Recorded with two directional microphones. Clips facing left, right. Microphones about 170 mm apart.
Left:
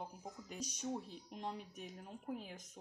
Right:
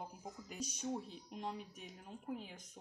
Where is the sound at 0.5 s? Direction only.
40° left (ahead or behind).